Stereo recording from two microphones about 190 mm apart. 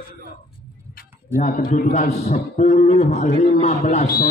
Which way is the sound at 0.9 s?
45° left (ahead or behind).